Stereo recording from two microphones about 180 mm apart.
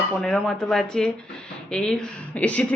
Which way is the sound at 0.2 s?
Centre (ahead or behind).